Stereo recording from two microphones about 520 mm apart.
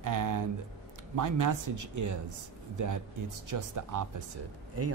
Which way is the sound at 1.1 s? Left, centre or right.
Right.